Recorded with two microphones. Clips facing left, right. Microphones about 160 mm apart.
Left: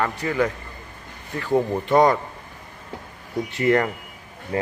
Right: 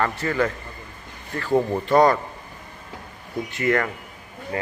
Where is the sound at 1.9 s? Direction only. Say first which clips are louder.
Even; 20° left (ahead or behind).